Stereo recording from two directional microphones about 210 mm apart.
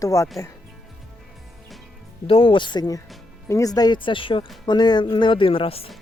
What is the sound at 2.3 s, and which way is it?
Speech, 25° left (ahead or behind).